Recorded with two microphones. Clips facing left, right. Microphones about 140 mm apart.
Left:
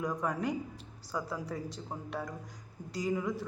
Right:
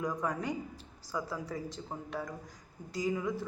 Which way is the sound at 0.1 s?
5° left (ahead or behind).